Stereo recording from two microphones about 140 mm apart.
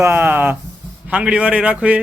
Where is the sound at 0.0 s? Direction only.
15° right (ahead or behind).